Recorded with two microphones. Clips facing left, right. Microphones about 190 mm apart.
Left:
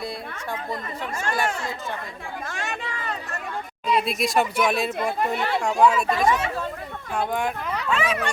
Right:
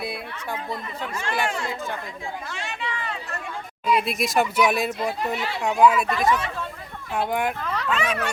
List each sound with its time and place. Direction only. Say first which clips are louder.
1.1 s speech: left 1 dB; 45° left (ahead or behind)
2.5 s chatter: left 1 dB; 50° left (ahead or behind)
3.8 s speech: even; centre (ahead or behind)
4.9 s speech: left 2 dB; 55° left (ahead or behind)
5.8 s speech: right 2 dB; 5° right (ahead or behind)
6.1 s speech: left 1 dB; 25° left (ahead or behind)
7.1 s speech: right 1 dB; 5° right (ahead or behind)
7.9 s speech: left 1 dB; 5° left (ahead or behind)